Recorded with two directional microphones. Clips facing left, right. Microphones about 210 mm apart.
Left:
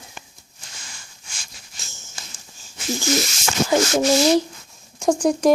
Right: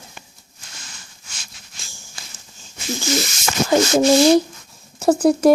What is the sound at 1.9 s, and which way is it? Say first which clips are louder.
Horse: even; 20° left (ahead or behind).